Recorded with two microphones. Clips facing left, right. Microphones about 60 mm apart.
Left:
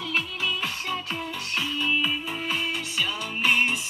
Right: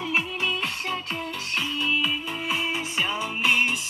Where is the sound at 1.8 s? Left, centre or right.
Centre.